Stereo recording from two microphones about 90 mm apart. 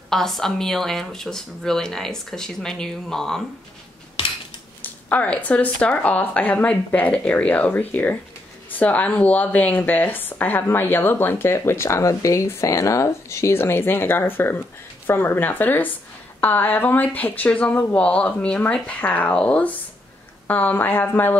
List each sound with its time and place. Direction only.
0.1 s speech: 5° left (ahead or behind)
4.8 s speech: 15° left (ahead or behind)